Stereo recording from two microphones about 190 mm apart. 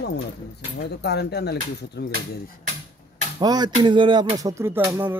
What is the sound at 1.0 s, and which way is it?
Speech, 60° left (ahead or behind).